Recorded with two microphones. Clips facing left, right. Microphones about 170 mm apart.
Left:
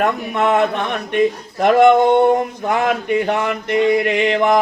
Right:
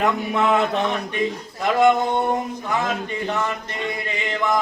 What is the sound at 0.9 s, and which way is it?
Speech, 65° left (ahead or behind).